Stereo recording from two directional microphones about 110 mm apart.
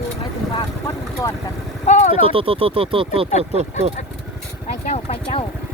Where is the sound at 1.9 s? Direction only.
90° left.